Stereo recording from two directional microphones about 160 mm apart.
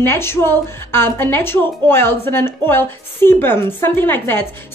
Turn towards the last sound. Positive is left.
turn(degrees=15)  # may be behind; listen again after turning